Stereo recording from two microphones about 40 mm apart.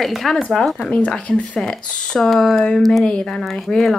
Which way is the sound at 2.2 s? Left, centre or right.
Centre.